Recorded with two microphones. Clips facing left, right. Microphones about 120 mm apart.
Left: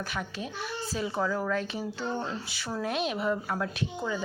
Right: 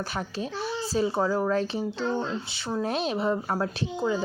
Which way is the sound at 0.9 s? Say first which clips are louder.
Right 5 dB; 30° right (ahead or behind).